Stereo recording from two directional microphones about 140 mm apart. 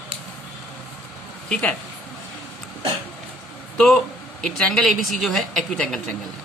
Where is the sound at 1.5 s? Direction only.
5° left (ahead or behind).